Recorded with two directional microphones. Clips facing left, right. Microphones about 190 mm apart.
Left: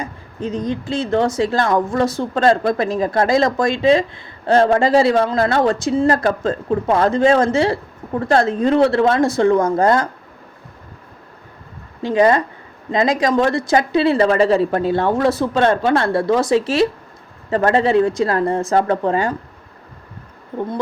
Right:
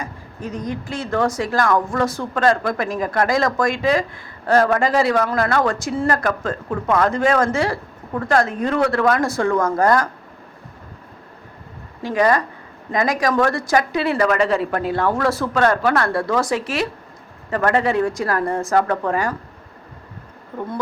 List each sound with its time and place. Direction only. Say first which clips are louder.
0.0 s speech: left 4 dB; 25° left (ahead or behind)
12.0 s speech: left 3 dB; 25° left (ahead or behind)